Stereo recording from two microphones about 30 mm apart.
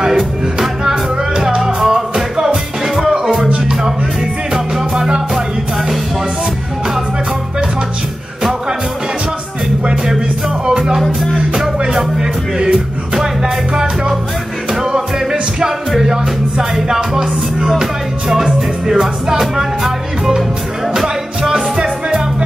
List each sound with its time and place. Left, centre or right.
0.0 s music: right
2.0 s music: centre
3.4 s music: right
4.6 s music: centre
10.6 s music: right
12.2 s music: right
16.8 s music: centre
18.9 s music: centre